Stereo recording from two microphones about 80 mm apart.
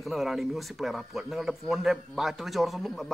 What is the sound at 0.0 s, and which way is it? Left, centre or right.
Speech, centre.